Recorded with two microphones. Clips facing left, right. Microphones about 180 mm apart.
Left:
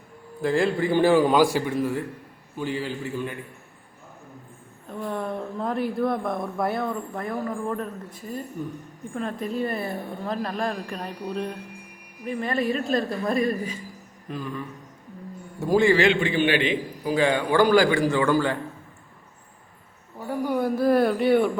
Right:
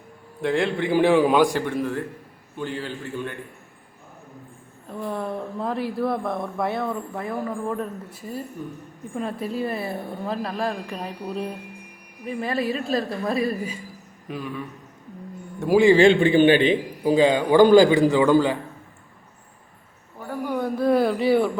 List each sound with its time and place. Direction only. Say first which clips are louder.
0.4 s a man's voice: even; centre (ahead or behind)
4.9 s speech: right 1 dB; centre (ahead or behind)
15.6 s a man's voice: right 3 dB; 10° right (ahead or behind)
15.9 s a man's voice: right 5 dB; 30° right (ahead or behind)
20.5 s speech: even; 5° left (ahead or behind)